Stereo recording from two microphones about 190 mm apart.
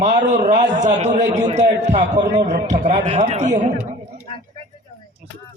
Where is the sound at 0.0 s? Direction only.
40° right (ahead or behind).